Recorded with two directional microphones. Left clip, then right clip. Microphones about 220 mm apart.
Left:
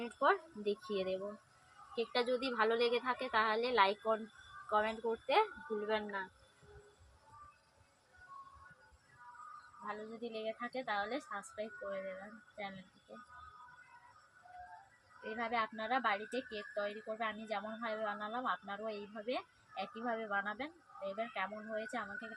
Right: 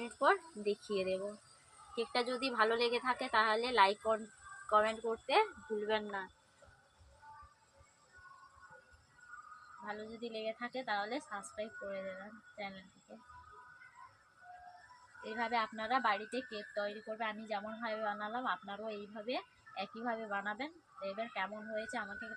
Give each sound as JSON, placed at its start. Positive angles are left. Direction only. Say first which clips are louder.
{"t": 0.0, "sound": "a woman's voice", "louder": "right 1 dB", "side_deg": -10}
{"t": 9.8, "sound": "speech", "louder": "even", "side_deg": -5}
{"t": 15.2, "sound": "speech", "louder": "right 1 dB", "side_deg": 0}